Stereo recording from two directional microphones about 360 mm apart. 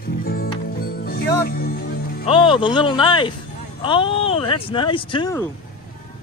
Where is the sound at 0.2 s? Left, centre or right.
Left.